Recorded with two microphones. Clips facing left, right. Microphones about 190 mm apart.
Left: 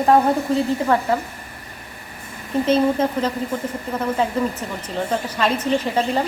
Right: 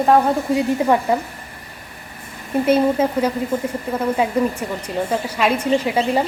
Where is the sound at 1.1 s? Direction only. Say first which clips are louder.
Right 2 dB; 15° right (ahead or behind).